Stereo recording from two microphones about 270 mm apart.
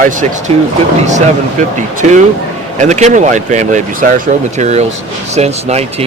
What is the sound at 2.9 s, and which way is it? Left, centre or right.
Speech, right.